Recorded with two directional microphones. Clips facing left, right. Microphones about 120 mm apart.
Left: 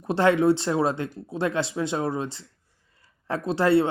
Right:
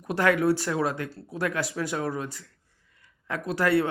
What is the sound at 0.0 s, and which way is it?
A man's voice, 30° left (ahead or behind).